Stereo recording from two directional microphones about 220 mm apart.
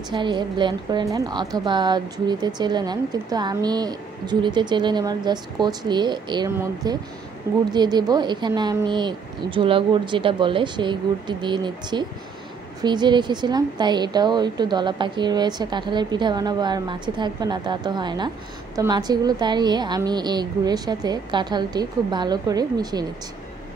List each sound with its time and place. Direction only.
0.1 s a woman's voice: 20° right (ahead or behind)